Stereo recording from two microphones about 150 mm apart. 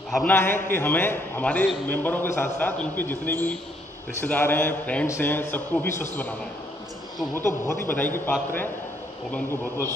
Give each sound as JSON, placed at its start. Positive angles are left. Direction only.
{"t": 0.1, "sound": "a man's voice", "side_deg": 10}
{"t": 7.3, "sound": "a man's voice", "side_deg": 15}